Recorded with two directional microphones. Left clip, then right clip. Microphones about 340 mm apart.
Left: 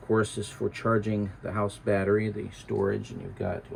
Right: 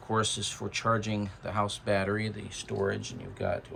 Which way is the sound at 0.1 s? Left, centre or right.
Centre.